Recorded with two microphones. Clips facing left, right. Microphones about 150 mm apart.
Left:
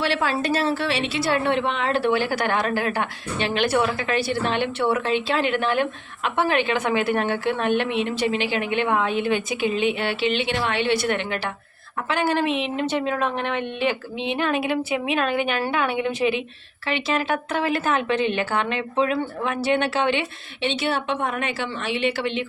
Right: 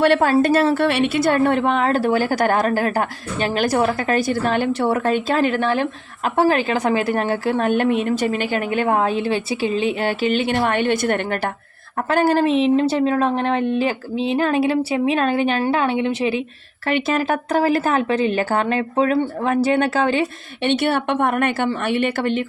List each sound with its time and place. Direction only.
0.0 s a woman's voice: 50° right (ahead or behind); by 16.4 s 30° right (ahead or behind)
16.8 s a woman's voice: 45° right (ahead or behind)
20.7 s speech: 55° right (ahead or behind)